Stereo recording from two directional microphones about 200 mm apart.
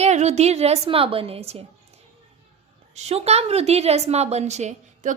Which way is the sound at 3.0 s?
30° right (ahead or behind).